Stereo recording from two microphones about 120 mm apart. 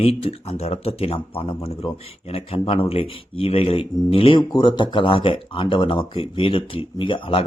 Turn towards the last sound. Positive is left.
turn(degrees=45)  # may be behind; listen again after turning